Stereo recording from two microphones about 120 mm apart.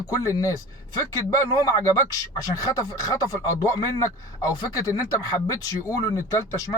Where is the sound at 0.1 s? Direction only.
30° left (ahead or behind).